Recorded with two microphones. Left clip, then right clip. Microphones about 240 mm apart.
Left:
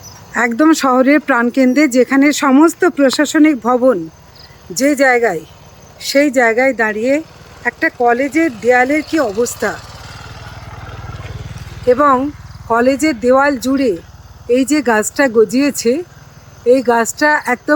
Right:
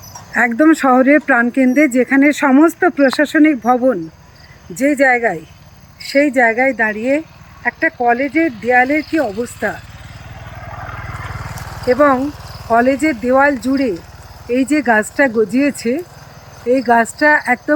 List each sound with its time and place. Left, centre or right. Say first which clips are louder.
0.3 s speech: even; centre
9.2 s speech: left 5 dB; left
11.9 s speech: left 1 dB; centre